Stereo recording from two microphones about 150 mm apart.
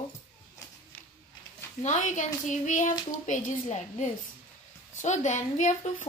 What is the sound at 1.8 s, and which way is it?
Speech, 55° left (ahead or behind).